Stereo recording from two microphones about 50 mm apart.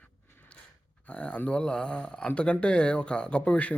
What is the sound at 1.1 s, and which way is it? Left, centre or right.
Speech, left.